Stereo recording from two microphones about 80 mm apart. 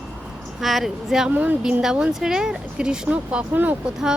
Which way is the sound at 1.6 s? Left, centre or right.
Centre.